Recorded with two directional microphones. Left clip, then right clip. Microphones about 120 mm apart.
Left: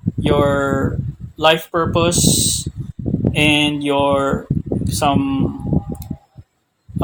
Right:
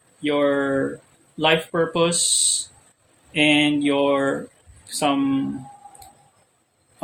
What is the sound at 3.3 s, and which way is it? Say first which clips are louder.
Speech: left 2 dB; 50° left (ahead or behind).